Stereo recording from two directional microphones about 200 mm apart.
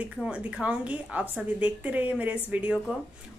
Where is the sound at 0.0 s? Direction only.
5° right (ahead or behind).